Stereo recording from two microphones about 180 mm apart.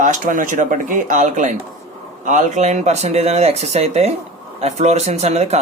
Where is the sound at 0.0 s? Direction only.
45° right (ahead or behind).